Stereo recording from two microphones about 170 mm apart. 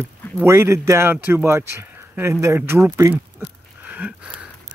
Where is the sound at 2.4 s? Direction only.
15° right (ahead or behind).